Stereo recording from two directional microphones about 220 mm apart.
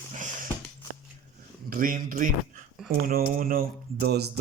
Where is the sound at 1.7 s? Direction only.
40° right (ahead or behind).